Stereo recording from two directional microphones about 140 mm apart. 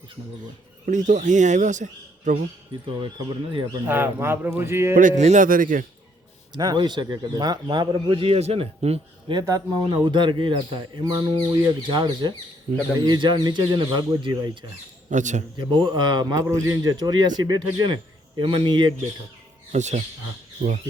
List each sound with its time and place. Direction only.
0.9 s a man's voice: 65° right (ahead or behind)
2.8 s speech: 35° right (ahead or behind)
3.8 s speech: 15° right (ahead or behind)
4.9 s speech: 60° right (ahead or behind)
6.5 s speech: 30° right (ahead or behind); by 9.0 s 45° right (ahead or behind)
9.3 s speech: 25° right (ahead or behind)
12.7 s speech: 70° right (ahead or behind)
13.1 s speech: 30° right (ahead or behind)
15.1 s a man's voice: 60° right (ahead or behind)
15.5 s speech: 35° right (ahead or behind)
19.7 s a man's voice: 55° right (ahead or behind)